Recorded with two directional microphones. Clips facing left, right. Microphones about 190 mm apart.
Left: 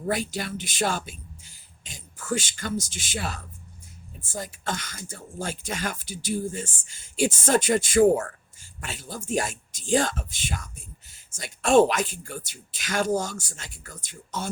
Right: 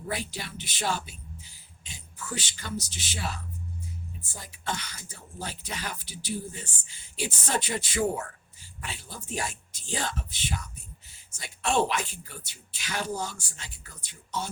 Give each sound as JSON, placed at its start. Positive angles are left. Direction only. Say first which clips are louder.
{"t": 0.1, "sound": "speech", "louder": "left 7 dB", "side_deg": 45}
{"t": 2.1, "sound": "speech", "louder": "left 8 dB", "side_deg": 45}